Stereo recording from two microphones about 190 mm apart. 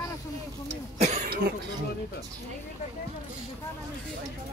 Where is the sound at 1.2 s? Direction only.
55° right (ahead or behind).